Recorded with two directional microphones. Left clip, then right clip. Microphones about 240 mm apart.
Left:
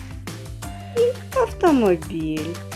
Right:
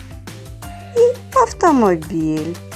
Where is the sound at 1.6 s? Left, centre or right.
Right.